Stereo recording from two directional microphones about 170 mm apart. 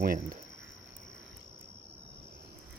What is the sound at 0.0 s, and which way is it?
Speech, 60° right (ahead or behind).